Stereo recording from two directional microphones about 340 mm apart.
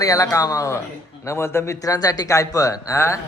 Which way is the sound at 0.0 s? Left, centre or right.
Centre.